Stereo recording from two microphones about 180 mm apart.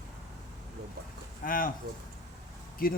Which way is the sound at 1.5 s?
50° left (ahead or behind).